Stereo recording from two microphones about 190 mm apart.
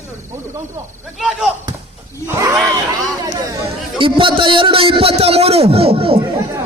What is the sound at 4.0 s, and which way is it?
A man's voice, 25° right (ahead or behind).